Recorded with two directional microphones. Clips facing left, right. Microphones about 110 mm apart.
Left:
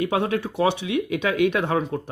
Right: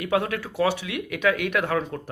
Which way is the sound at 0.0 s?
25° left (ahead or behind).